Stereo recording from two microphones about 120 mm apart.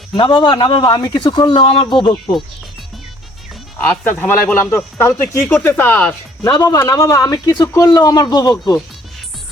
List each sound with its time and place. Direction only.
0.1 s speech: 45° left (ahead or behind)
3.8 s a man's voice: 15° left (ahead or behind)
6.4 s a man's voice: 30° left (ahead or behind)